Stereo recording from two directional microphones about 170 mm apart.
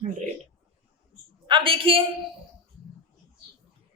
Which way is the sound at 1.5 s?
30° right (ahead or behind).